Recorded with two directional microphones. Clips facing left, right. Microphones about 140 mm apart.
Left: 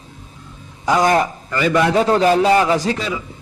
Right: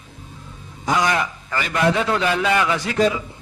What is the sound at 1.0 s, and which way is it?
A man's voice, 40° left (ahead or behind).